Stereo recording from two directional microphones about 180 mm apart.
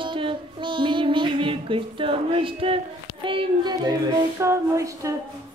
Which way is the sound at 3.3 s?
25° right (ahead or behind).